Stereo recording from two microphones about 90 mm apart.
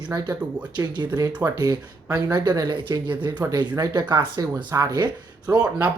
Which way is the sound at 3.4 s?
45° right (ahead or behind).